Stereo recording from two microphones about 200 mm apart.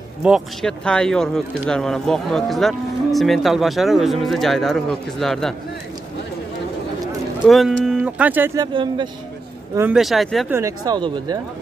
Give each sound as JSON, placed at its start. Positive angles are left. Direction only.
{"t": 0.2, "sound": "speech", "side_deg": 0}
{"t": 7.4, "sound": "speech", "side_deg": 0}
{"t": 8.5, "sound": "speech", "side_deg": -20}
{"t": 9.8, "sound": "speech", "side_deg": -5}
{"t": 10.9, "sound": "speech", "side_deg": -20}